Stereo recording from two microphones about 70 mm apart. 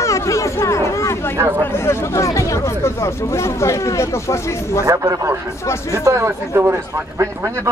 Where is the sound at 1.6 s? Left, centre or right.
Left.